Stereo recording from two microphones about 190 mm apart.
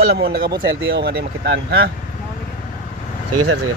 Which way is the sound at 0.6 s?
70° right (ahead or behind).